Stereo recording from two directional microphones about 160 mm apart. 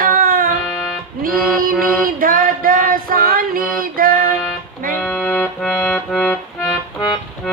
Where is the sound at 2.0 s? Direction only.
65° right (ahead or behind).